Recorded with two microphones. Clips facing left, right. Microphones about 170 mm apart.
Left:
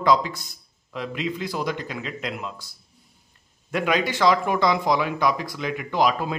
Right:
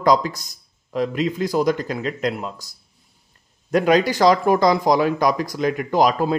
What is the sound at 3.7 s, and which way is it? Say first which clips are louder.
Speech: right 7 dB; 40° right (ahead or behind).